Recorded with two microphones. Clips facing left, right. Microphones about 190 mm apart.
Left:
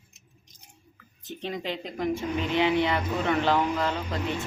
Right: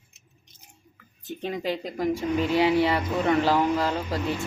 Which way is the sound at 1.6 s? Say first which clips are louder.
Right 4 dB; 40° right (ahead or behind).